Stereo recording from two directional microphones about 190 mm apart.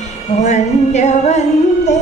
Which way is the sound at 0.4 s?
35° left (ahead or behind).